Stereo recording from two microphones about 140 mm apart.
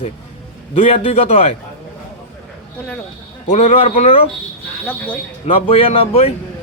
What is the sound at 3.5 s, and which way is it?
Speech, 50° left (ahead or behind).